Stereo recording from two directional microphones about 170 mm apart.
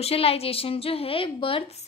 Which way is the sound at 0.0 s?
35° left (ahead or behind).